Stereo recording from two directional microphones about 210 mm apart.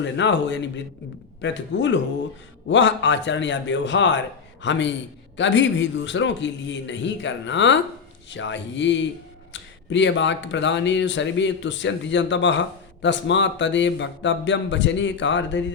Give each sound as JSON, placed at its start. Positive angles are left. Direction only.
{"t": 0.0, "sound": "speech", "side_deg": 60}